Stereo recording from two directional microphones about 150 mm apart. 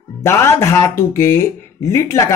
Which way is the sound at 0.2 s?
15° left (ahead or behind).